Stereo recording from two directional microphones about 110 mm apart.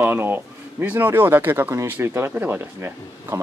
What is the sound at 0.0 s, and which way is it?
Speech, 20° right (ahead or behind).